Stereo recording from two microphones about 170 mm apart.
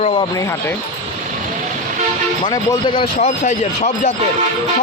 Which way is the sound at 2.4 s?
25° left (ahead or behind).